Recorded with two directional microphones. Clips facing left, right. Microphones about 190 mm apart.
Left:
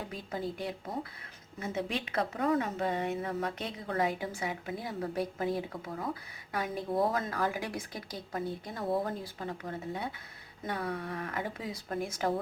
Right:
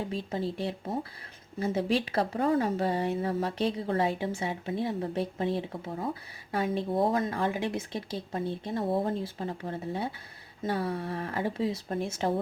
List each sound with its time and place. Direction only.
0.0 s a woman's voice: 25° right (ahead or behind)